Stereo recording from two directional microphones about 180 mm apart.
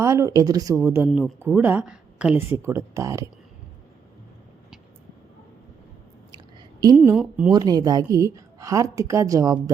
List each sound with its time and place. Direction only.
0.0 s speech: 15° right (ahead or behind)
6.3 s a sound: 20° right (ahead or behind)
6.9 s speech: 10° right (ahead or behind)
7.5 s a woman's voice: 20° right (ahead or behind)